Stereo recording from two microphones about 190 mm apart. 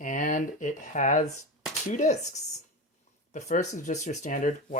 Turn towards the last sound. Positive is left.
turn(degrees=40)  # may be behind; listen again after turning